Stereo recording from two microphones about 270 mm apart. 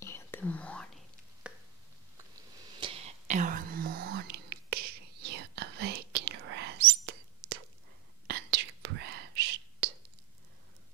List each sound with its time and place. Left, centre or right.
0.0 s whispering: centre
2.8 s whispering: right